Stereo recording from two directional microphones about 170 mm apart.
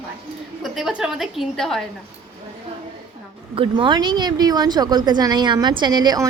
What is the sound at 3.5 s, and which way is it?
Speech, 30° right (ahead or behind).